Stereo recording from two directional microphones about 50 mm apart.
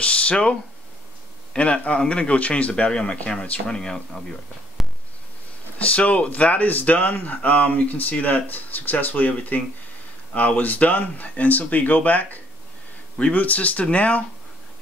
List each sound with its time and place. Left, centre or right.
0.0 s a man's voice: left
5.9 s a man's voice: left